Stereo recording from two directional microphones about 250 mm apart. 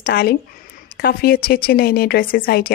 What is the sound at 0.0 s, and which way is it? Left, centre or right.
Speech, left.